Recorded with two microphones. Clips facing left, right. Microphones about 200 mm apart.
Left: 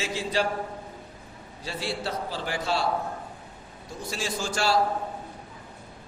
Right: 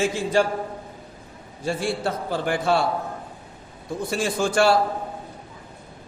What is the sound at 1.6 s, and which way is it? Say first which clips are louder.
A man's voice: right 7 dB; 50° right (ahead or behind).